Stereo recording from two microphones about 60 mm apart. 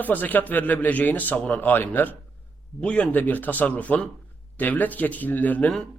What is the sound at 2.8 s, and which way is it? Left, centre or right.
Speech, centre.